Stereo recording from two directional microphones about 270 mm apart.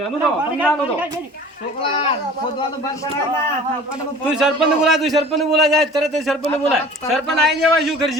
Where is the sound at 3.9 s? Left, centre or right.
Centre.